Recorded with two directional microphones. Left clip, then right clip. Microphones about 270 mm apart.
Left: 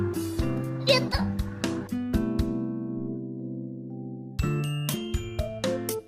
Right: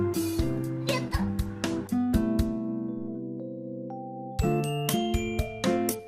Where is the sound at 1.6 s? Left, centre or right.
Centre.